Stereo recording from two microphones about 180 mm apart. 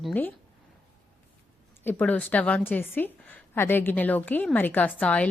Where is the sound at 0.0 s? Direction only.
10° left (ahead or behind).